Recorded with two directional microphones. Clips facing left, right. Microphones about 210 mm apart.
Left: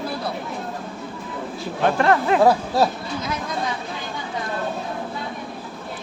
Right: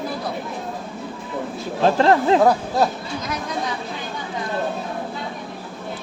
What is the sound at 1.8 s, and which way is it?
Speech, 30° right (ahead or behind).